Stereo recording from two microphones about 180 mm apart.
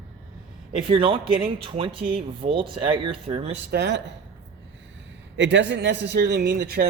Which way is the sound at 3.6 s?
65° right (ahead or behind).